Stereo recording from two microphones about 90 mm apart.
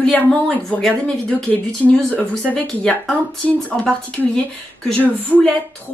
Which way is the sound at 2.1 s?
20° left (ahead or behind).